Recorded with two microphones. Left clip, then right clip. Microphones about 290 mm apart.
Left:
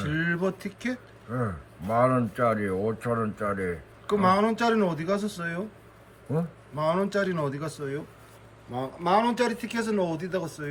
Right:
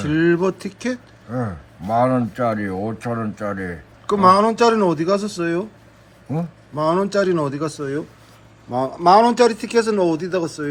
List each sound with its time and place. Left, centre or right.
0.0 s speech: centre
1.3 s speech: centre
4.0 s speech: centre
6.7 s speech: centre